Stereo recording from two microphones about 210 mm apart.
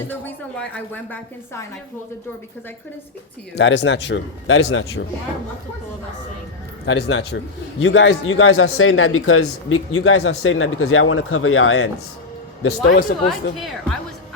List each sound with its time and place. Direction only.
0.1 s speech: 10° left (ahead or behind)
3.5 s speech: 60° left (ahead or behind)
6.8 s speech: 60° left (ahead or behind); by 11.9 s 75° left (ahead or behind)
12.9 s speech: 45° left (ahead or behind)